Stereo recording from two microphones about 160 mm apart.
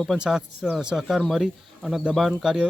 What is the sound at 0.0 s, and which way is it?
Speech, centre (ahead or behind).